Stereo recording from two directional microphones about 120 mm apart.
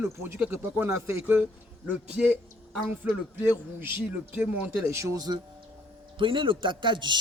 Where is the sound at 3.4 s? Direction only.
15° right (ahead or behind); by 5.4 s 30° right (ahead or behind).